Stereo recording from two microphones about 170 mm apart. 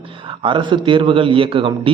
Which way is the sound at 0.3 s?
30° right (ahead or behind).